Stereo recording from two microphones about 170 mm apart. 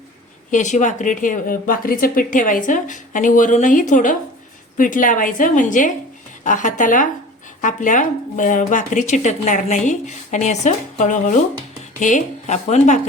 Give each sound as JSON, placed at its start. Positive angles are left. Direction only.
{"t": 0.5, "sound": "speech", "side_deg": 45}